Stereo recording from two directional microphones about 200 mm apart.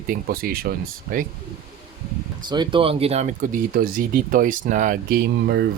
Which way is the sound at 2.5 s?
25° right (ahead or behind).